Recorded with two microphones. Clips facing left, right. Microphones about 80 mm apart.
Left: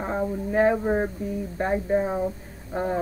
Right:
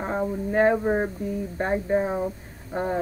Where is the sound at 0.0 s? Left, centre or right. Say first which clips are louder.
Even; centre.